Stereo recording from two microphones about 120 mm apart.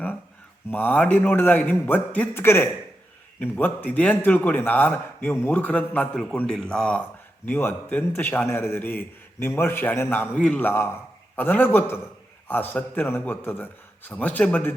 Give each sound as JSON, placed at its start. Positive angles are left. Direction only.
{"t": 0.7, "sound": "a man's voice", "side_deg": 15}